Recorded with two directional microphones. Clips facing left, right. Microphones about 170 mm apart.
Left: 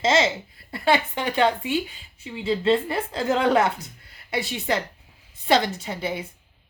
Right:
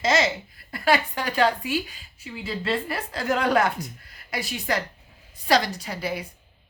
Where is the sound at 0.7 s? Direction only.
25° left (ahead or behind).